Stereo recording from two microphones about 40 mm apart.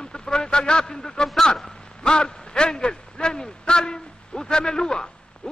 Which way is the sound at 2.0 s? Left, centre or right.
Centre.